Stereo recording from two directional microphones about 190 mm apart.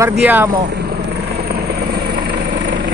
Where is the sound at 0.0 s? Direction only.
10° right (ahead or behind).